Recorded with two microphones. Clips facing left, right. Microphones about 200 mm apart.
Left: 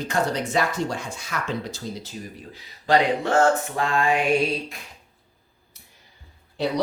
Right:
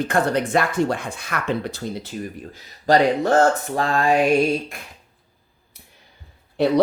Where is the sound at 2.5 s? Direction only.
40° right (ahead or behind).